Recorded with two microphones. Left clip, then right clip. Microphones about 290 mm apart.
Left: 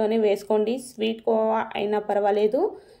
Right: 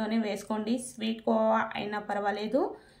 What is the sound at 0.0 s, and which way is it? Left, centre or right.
A woman's voice, centre.